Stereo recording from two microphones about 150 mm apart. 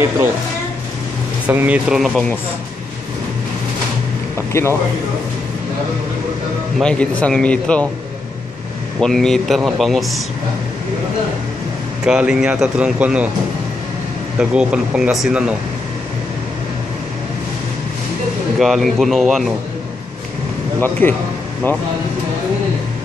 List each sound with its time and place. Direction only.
1.5 s speech: 10° right (ahead or behind)
4.4 s speech: 20° left (ahead or behind)
6.8 s speech: 5° left (ahead or behind)
9.0 s speech: 5° left (ahead or behind)
12.0 s speech: 5° right (ahead or behind)
14.4 s speech: 5° right (ahead or behind)
18.6 s speech: centre (ahead or behind)
21.0 s speech: 15° left (ahead or behind)